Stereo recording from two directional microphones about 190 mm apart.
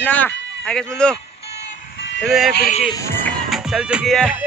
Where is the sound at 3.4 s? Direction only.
Centre (ahead or behind).